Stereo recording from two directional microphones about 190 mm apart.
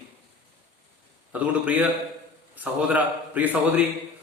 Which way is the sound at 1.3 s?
10° right (ahead or behind).